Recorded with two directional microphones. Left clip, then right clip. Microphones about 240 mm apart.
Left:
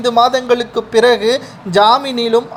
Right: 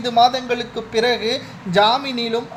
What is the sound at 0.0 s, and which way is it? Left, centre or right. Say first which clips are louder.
A man's voice: left 4 dB; centre.